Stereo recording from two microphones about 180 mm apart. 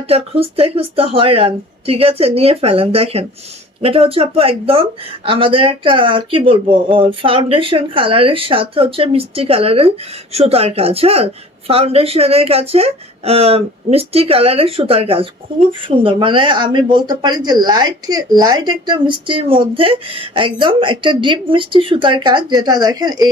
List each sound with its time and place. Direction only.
0.1 s a woman's voice: 35° right (ahead or behind)